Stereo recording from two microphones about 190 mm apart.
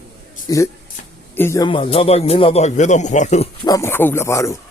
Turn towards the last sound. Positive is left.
turn(degrees=15)  # may be behind; listen again after turning